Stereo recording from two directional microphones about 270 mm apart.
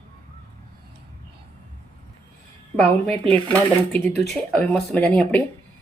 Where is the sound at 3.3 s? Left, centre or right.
Centre.